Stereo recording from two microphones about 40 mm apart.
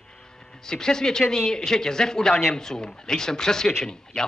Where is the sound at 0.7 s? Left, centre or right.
Centre.